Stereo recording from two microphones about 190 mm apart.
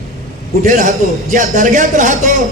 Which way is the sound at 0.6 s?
40° right (ahead or behind).